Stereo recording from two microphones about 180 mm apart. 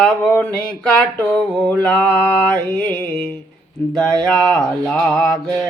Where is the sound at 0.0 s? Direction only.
5° left (ahead or behind).